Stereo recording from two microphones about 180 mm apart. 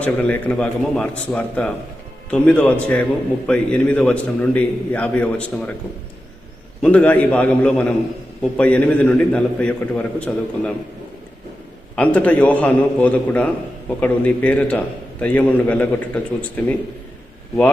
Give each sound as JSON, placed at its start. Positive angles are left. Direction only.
{"t": 0.0, "sound": "a man's voice", "side_deg": 5}
{"t": 6.8, "sound": "a man's voice", "side_deg": 10}
{"t": 11.9, "sound": "a man's voice", "side_deg": 10}